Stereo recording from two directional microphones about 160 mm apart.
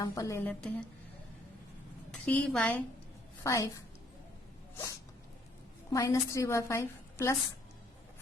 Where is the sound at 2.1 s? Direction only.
5° left (ahead or behind).